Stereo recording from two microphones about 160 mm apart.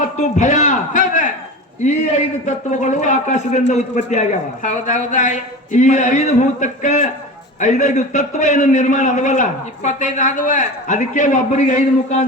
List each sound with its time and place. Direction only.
0.2 s a man's voice: 50° left (ahead or behind)
2.5 s a man's voice: 50° left (ahead or behind)